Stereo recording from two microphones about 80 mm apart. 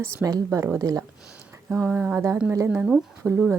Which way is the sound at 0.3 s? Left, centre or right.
Right.